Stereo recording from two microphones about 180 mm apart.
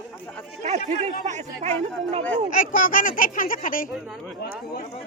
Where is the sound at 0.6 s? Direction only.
40° right (ahead or behind).